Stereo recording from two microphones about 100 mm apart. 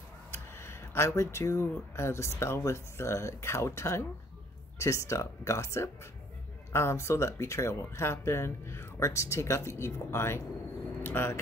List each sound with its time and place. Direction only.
0.3 s speech: 25° left (ahead or behind)
11.0 s vehicle: 20° left (ahead or behind)